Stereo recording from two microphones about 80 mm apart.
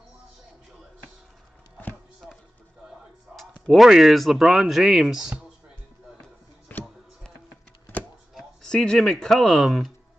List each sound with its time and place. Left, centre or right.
3.3 s speech: centre
6.7 s music: left
8.6 s speech: centre